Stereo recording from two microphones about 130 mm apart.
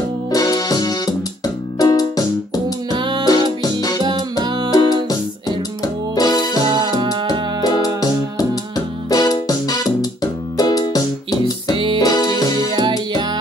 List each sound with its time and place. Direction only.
0.3 s music: 30° left (ahead or behind)
2.9 s music: 35° right (ahead or behind)
4.6 s music: 30° left (ahead or behind)
6.6 s music: 35° right (ahead or behind)
7.6 s music: 30° left (ahead or behind)
11.7 s music: 40° right (ahead or behind)
12.0 s music: 30° left (ahead or behind)